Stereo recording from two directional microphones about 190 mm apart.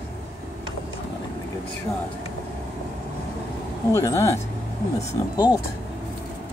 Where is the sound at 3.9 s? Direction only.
15° left (ahead or behind).